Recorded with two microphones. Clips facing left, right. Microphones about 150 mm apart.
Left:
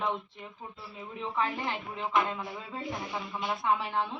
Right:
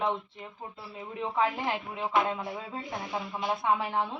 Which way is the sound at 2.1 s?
10° right (ahead or behind).